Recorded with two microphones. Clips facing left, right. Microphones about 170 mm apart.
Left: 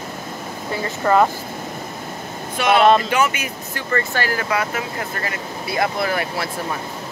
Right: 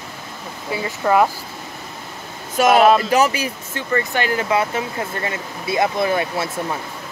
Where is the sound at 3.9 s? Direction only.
20° right (ahead or behind).